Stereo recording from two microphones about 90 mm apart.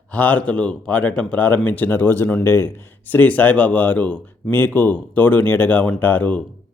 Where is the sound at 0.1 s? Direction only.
15° left (ahead or behind).